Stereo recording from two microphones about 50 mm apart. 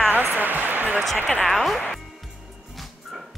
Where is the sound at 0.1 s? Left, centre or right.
Right.